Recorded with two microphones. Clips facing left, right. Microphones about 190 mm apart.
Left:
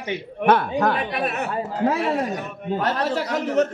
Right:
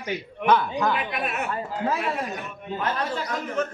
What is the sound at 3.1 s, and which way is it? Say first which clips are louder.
Speech: left 6 dB; 75° left (ahead or behind).